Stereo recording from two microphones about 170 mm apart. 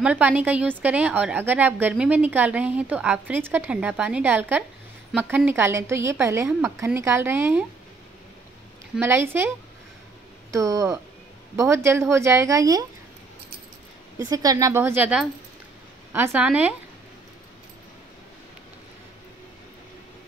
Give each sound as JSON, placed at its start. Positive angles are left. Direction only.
{"t": 0.0, "sound": "a woman's voice", "side_deg": -10}
{"t": 8.9, "sound": "a woman's voice", "side_deg": -15}
{"t": 10.5, "sound": "a woman's voice", "side_deg": -20}
{"t": 14.1, "sound": "a woman's voice", "side_deg": -20}